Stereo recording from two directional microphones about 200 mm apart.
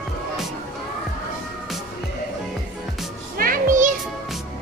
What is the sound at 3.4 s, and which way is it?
Music, 40° right (ahead or behind).